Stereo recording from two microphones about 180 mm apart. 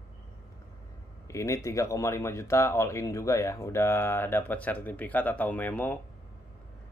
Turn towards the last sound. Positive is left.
turn(degrees=10)  # may be behind; listen again after turning